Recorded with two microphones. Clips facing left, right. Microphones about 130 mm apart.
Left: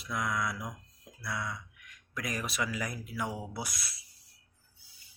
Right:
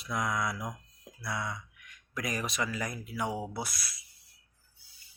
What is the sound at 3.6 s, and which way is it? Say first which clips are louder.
Speech: right 1 dB; 20° left (ahead or behind).